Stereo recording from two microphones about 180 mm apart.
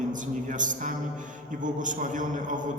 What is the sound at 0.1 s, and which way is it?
A man's voice, 45° right (ahead or behind).